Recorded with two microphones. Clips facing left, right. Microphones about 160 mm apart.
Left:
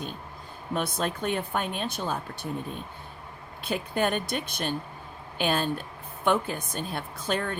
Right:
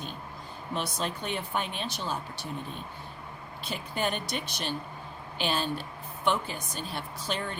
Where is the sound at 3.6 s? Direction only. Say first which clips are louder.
Left 5 dB; 55° left (ahead or behind).